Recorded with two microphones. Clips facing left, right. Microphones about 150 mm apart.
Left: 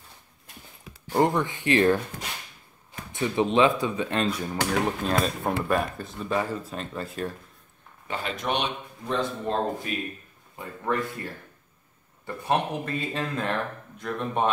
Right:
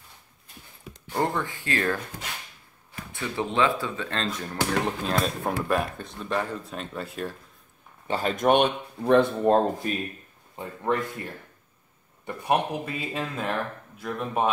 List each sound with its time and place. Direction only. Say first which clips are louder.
1.1 s speech: left 4 dB; 15° left (ahead or behind)
3.1 s speech: left 5 dB; 20° left (ahead or behind); by 7.3 s centre (ahead or behind)
8.1 s speech: right 7 dB; 40° right (ahead or behind)
10.5 s speech: right 2 dB; 20° right (ahead or behind)
12.3 s speech: right 1 dB; 15° right (ahead or behind)